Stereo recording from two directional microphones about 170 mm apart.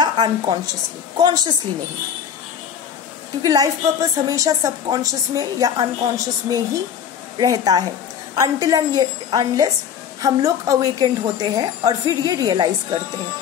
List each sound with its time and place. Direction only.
0.0 s a woman's voice: 25° right (ahead or behind)
3.4 s a woman's voice: 20° right (ahead or behind)